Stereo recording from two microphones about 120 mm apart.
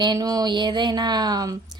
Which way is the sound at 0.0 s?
35° right (ahead or behind).